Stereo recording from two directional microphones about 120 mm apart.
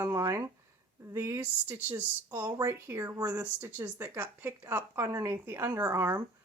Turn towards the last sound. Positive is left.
turn(degrees=-25)  # may be behind; listen again after turning